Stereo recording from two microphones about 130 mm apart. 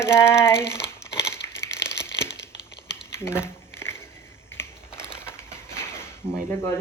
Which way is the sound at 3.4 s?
20° left (ahead or behind).